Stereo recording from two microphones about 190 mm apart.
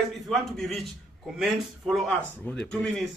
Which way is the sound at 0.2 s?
Centre (ahead or behind).